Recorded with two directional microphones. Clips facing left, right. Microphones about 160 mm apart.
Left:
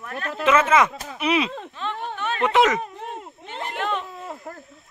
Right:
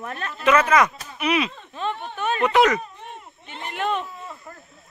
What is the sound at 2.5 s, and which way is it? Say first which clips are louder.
Speech: even; 20° left (ahead or behind).